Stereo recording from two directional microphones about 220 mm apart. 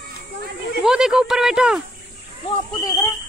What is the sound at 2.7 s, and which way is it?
Speech, 15° left (ahead or behind).